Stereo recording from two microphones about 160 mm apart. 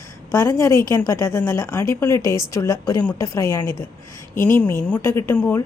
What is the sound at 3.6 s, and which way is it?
Speech, 30° right (ahead or behind).